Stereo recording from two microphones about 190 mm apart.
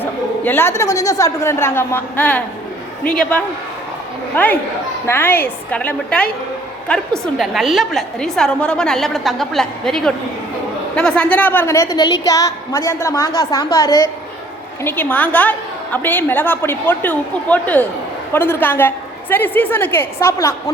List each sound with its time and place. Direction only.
0.0 s a woman's voice: 10° left (ahead or behind)
14.8 s a woman's voice: 10° left (ahead or behind)